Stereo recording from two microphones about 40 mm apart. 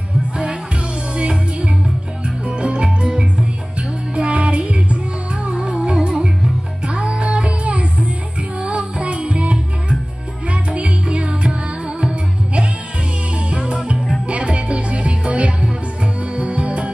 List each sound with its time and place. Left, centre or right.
1.1 s music: right
12.0 s music: right